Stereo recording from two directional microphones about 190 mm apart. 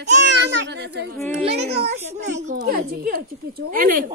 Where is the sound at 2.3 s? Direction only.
40° right (ahead or behind).